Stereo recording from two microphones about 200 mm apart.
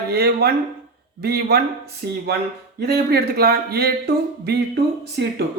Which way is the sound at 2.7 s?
50° right (ahead or behind).